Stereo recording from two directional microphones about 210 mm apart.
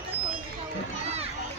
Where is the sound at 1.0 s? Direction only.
30° right (ahead or behind).